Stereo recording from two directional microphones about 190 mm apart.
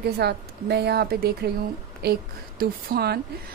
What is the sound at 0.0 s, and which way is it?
A woman's voice, 60° right (ahead or behind).